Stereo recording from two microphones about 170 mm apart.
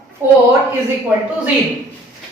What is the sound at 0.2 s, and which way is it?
Speech, 15° right (ahead or behind).